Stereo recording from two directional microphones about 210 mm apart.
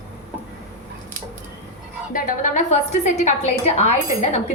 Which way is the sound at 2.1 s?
40° left (ahead or behind).